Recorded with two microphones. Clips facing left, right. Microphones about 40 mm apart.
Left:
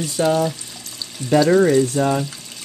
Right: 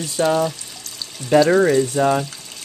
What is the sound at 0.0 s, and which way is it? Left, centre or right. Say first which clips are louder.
Speech: even; centre.